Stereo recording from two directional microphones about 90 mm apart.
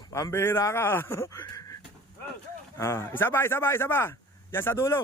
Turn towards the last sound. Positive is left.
turn(degrees=25)  # may be behind; listen again after turning